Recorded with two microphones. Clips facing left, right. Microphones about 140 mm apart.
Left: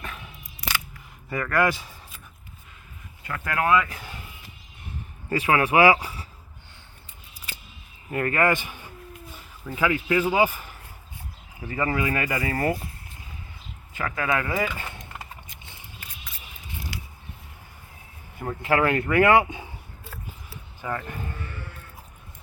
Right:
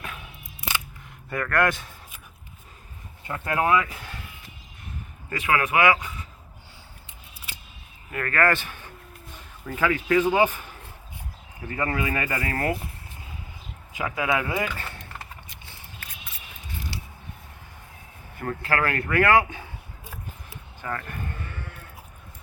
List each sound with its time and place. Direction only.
0.0 s a sound: 5° right (ahead or behind)
1.3 s speech: centre (ahead or behind)
3.2 s speech: 25° right (ahead or behind)
5.3 s speech: 30° left (ahead or behind)
8.1 s a man's voice: 20° left (ahead or behind)
11.7 s speech: centre (ahead or behind)
13.9 s speech: 10° right (ahead or behind)
14.8 s a sound: 15° left (ahead or behind)
16.9 s a sound: 30° right (ahead or behind)
18.3 s speech: 15° left (ahead or behind)
20.8 s a man's voice: 10° left (ahead or behind)